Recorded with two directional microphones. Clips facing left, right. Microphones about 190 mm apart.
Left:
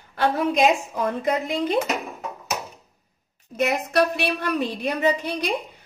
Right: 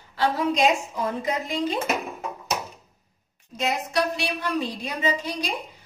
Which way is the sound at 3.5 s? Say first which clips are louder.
Left 4 dB; 60° left (ahead or behind).